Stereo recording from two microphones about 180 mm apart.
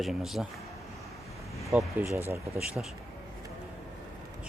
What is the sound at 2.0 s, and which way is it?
Speech, 10° right (ahead or behind).